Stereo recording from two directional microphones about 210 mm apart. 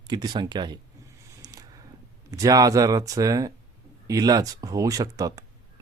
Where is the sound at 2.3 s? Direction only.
15° right (ahead or behind).